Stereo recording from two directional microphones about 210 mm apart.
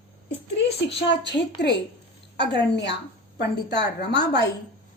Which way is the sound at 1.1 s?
55° left (ahead or behind).